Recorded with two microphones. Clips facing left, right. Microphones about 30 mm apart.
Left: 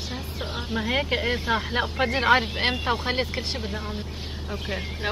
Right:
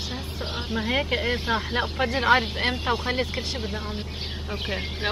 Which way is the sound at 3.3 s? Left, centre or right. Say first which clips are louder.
Even; centre.